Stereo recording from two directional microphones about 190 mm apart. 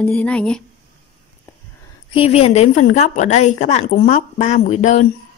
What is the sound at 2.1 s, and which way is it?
A woman's voice, 30° left (ahead or behind).